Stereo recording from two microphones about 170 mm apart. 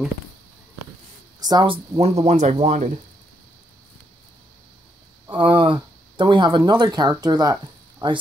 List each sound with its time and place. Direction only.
1.4 s speech: 25° right (ahead or behind); by 2.9 s 45° right (ahead or behind)
5.2 s speech: 25° right (ahead or behind)